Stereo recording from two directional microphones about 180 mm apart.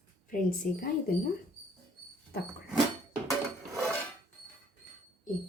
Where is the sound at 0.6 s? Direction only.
50° left (ahead or behind).